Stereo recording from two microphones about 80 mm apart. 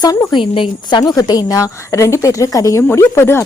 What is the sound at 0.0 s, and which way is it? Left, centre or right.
Speech, left.